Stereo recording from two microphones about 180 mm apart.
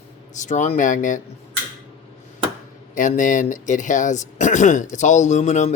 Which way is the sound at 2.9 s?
45° left (ahead or behind).